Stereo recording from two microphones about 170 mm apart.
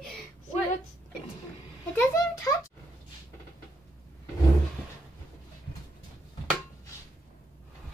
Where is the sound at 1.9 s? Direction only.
15° left (ahead or behind).